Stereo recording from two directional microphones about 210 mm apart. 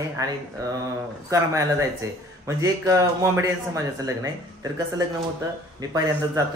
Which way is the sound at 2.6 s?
15° right (ahead or behind).